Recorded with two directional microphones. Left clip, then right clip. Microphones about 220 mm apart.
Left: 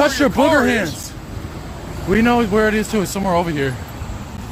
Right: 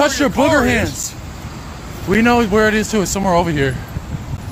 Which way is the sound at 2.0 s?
15° right (ahead or behind).